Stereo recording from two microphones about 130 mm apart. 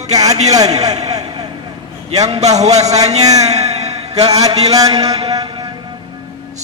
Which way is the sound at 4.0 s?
50° right (ahead or behind).